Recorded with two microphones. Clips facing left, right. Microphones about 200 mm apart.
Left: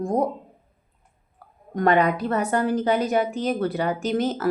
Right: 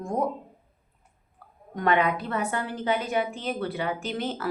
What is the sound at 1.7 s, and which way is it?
A woman's voice, 40° left (ahead or behind).